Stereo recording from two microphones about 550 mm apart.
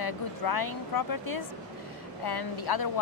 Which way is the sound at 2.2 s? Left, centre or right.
Left.